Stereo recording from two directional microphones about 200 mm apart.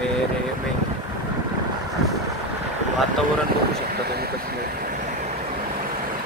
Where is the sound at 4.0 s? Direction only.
50° right (ahead or behind).